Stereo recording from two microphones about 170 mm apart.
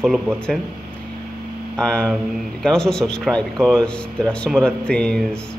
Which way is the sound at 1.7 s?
5° left (ahead or behind).